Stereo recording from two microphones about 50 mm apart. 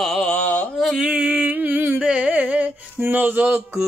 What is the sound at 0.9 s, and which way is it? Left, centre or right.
Music, right.